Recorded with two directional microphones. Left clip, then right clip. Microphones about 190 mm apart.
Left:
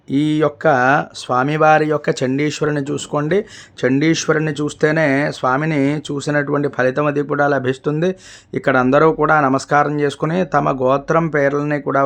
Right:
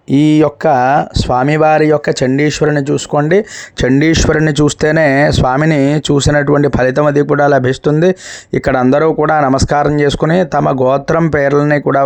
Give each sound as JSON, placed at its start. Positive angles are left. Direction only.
{"t": 0.1, "sound": "speech", "side_deg": -30}